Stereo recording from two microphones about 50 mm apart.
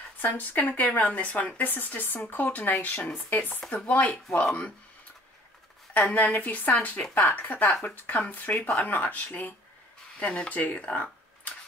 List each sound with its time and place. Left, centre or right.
0.2 s speech: left
1.7 s speech: left
5.9 s speech: left
10.1 s speech: left
10.5 s speech: left
10.9 s a sound: left